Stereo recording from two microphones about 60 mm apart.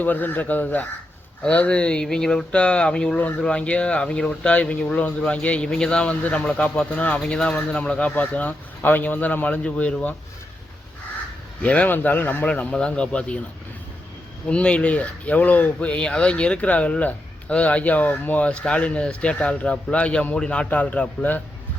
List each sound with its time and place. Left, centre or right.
0.0 s speech: left
11.6 s speech: left
12.5 s speech: centre
14.4 s speech: centre
18.4 s speech: centre